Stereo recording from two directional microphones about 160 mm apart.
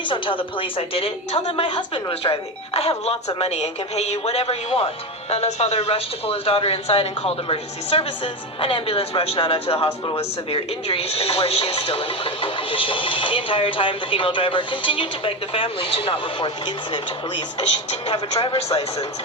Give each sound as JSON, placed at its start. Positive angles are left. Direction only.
{"t": 0.0, "sound": "a woman's voice", "side_deg": 30}
{"t": 18.1, "sound": "a woman's voice", "side_deg": 35}